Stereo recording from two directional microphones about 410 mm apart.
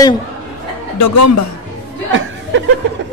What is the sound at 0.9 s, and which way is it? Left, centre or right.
Speech, left.